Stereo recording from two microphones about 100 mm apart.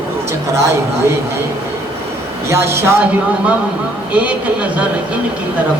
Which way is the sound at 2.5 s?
25° right (ahead or behind).